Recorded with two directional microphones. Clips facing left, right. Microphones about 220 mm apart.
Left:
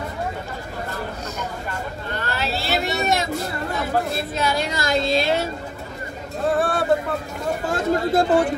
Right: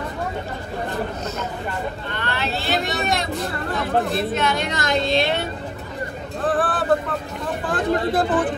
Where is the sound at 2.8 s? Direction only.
Centre (ahead or behind).